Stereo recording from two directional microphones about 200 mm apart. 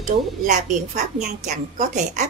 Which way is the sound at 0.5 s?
40° right (ahead or behind).